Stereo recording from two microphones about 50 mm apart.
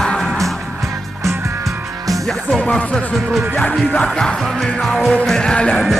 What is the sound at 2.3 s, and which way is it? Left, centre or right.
Music, centre.